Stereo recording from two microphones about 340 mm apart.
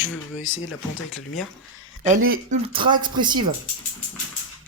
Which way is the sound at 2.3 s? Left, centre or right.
Centre.